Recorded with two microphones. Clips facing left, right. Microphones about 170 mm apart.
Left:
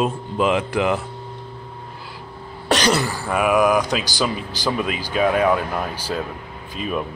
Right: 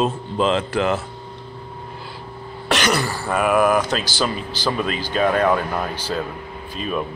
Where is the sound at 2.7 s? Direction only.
35° left (ahead or behind).